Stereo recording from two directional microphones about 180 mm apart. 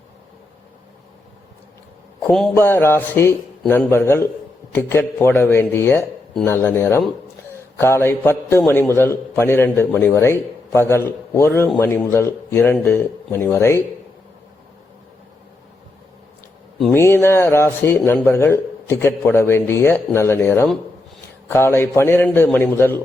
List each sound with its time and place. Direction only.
2.6 s a man's voice: 15° left (ahead or behind)
16.9 s a man's voice: 15° left (ahead or behind)